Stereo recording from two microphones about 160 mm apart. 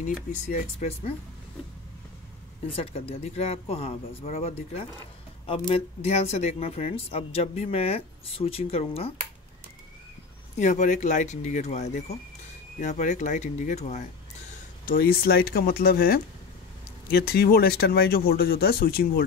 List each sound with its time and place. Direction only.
0.3 s speech: 50° left (ahead or behind)
2.7 s speech: 35° left (ahead or behind)
10.6 s speech: 50° left (ahead or behind)
14.9 s speech: 70° left (ahead or behind)